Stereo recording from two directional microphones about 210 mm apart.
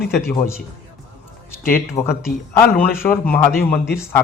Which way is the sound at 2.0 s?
15° left (ahead or behind).